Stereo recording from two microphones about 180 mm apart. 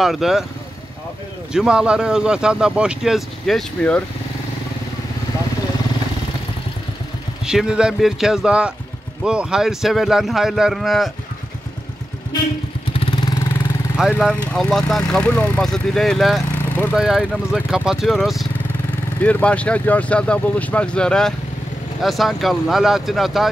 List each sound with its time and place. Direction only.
0.0 s speech: centre (ahead or behind)
1.5 s speech: 5° right (ahead or behind)
7.4 s speech: 5° right (ahead or behind)
13.0 s vehicle: 25° left (ahead or behind)
14.2 s speech: 5° left (ahead or behind)